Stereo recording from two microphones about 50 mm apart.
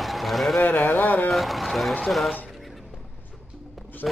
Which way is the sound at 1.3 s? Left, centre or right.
Centre.